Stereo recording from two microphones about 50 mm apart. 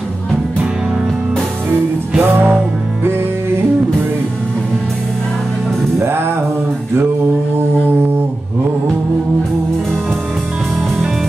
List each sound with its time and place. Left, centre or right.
1.7 s music: right
5.9 s music: right